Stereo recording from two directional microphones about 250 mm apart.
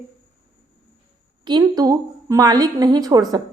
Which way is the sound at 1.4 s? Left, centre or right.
Centre.